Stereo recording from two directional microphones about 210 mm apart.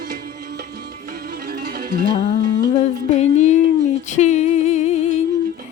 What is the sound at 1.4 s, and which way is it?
Music, 45° right (ahead or behind).